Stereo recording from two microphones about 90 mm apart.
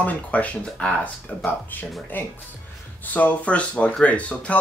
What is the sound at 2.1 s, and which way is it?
Speech, 20° left (ahead or behind).